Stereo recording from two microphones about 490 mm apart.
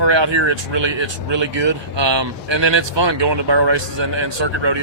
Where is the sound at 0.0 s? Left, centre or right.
Right.